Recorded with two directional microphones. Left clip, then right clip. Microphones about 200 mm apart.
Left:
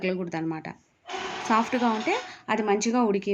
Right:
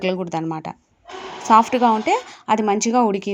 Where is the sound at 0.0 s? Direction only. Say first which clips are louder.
Right 6 dB; 35° right (ahead or behind).